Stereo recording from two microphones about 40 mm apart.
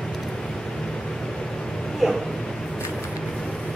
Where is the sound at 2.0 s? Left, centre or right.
Centre.